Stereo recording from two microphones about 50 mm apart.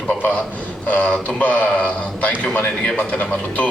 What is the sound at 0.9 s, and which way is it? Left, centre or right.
Speech, left.